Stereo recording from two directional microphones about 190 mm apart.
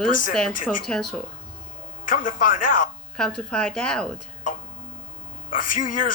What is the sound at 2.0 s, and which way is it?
Speech, 45° left (ahead or behind).